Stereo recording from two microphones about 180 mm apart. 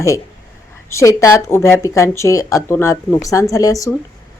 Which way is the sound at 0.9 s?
15° left (ahead or behind).